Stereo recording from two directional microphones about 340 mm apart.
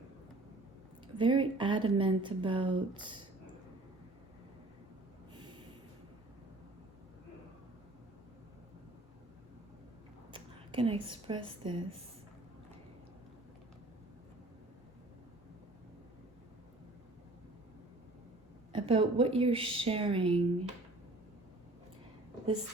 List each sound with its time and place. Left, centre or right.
1.0 s a woman's voice: centre
5.3 s snort: centre
10.3 s a woman's voice: centre
18.7 s a woman's voice: centre